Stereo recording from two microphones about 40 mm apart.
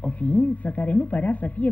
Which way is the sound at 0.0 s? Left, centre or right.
Left.